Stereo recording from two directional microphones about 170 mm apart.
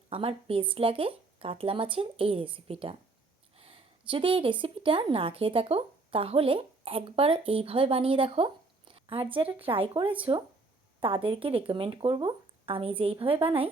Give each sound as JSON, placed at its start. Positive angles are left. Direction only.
{"t": 0.1, "sound": "speech", "side_deg": -35}